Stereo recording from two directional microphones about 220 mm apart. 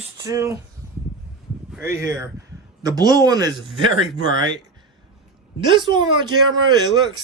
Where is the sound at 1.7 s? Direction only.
10° right (ahead or behind).